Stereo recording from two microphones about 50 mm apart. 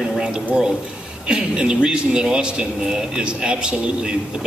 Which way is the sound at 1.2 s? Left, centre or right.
Centre.